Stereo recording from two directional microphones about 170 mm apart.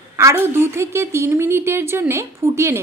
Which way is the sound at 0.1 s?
15° right (ahead or behind).